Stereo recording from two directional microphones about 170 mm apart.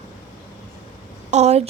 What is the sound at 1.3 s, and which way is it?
Speech, 40° right (ahead or behind).